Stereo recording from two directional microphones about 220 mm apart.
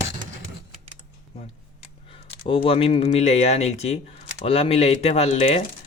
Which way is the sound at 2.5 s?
25° left (ahead or behind).